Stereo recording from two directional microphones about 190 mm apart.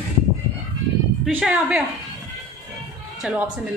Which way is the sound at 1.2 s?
5° right (ahead or behind).